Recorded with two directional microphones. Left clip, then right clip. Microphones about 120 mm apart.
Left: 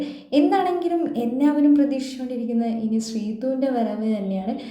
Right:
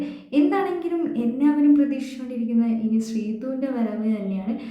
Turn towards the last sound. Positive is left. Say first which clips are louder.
# left 3 dB
turn(degrees=20)  # may be behind; listen again after turning